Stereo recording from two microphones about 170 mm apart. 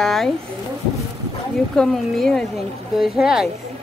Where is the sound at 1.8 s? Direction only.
5° left (ahead or behind).